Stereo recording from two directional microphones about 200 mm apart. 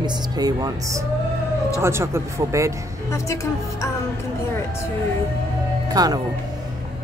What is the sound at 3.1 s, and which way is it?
Speech, 15° left (ahead or behind).